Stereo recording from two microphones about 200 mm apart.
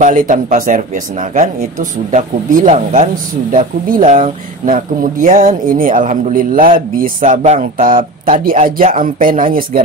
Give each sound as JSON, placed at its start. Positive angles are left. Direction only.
{"t": 0.0, "sound": "speech", "side_deg": -40}